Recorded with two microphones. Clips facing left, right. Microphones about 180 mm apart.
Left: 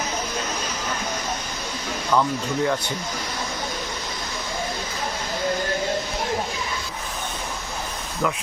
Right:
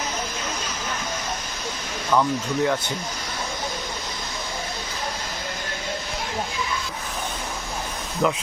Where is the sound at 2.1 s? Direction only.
5° right (ahead or behind).